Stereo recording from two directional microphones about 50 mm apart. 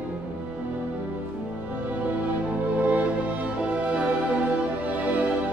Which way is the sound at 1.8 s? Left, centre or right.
Right.